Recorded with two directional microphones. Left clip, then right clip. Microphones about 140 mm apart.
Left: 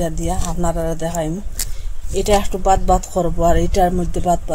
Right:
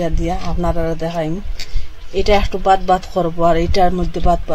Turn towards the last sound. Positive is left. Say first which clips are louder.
# right 1 dB
turn(degrees=-20)  # may be behind; listen again after turning